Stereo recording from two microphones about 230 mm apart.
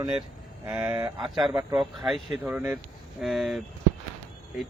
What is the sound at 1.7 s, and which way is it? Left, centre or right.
Speech, centre.